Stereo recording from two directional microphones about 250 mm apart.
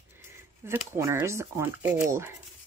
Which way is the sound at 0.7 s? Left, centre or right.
Centre.